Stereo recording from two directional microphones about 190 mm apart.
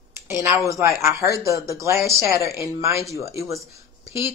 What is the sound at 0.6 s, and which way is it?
Speech, 15° right (ahead or behind).